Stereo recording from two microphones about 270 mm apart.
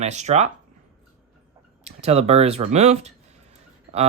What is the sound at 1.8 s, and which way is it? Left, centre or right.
Speech, right.